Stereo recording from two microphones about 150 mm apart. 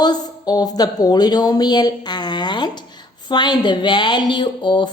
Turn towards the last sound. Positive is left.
turn(degrees=30)  # may be behind; listen again after turning